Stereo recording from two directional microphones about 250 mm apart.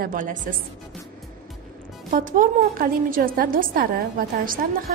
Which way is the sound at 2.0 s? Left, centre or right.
Right.